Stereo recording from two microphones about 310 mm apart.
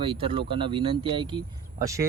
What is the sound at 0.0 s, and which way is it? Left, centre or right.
Speech, centre.